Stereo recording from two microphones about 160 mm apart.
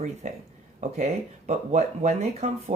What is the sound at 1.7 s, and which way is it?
Speech, 45° right (ahead or behind).